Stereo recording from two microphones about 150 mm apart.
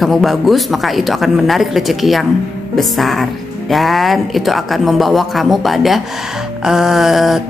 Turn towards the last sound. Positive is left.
turn(degrees=0)  # may be behind; listen again after turning